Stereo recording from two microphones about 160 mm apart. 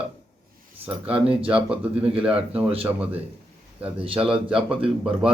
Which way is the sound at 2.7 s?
35° right (ahead or behind).